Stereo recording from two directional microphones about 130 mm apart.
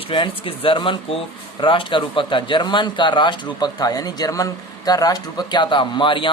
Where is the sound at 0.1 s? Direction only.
40° left (ahead or behind).